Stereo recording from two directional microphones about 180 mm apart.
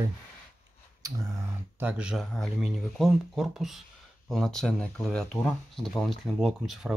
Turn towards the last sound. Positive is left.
turn(degrees=0)  # may be behind; listen again after turning